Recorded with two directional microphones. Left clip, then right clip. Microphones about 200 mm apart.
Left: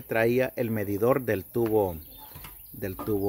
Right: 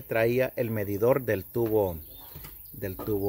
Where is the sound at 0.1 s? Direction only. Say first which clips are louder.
Left 1 dB; 10° left (ahead or behind).